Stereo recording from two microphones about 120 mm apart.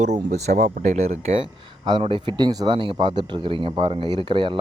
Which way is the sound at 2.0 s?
45° right (ahead or behind).